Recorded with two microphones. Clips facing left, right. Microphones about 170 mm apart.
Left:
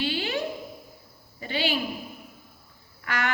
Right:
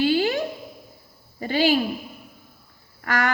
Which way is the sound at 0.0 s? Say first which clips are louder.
Right 8 dB; 40° right (ahead or behind).